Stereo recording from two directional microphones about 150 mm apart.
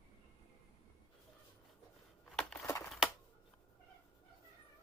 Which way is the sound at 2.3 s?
Centre (ahead or behind).